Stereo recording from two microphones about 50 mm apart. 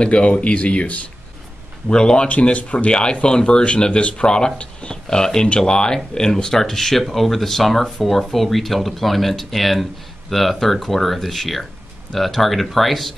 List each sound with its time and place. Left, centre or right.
0.0 s speech: left; by 13.1 s centre